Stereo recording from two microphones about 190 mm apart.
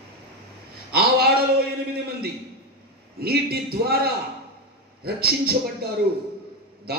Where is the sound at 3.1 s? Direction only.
55° right (ahead or behind).